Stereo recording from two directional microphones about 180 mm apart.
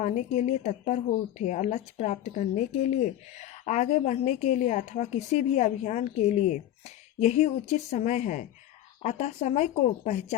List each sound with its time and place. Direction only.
0.0 s speech: 40° left (ahead or behind)